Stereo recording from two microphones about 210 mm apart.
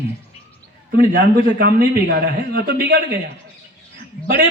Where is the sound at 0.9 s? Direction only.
50° right (ahead or behind).